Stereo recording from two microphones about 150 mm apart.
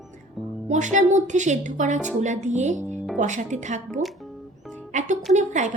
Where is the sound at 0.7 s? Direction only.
55° right (ahead or behind).